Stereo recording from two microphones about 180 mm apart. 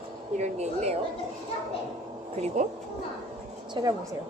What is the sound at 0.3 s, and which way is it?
Speech, 40° right (ahead or behind).